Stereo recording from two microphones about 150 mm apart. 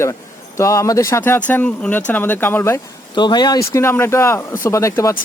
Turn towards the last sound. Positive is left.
turn(degrees=20)  # may be behind; listen again after turning